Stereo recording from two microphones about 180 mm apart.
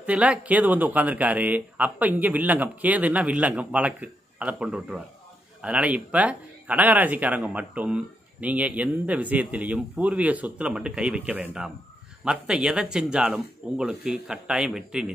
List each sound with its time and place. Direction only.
0.0 s speech: 5° right (ahead or behind)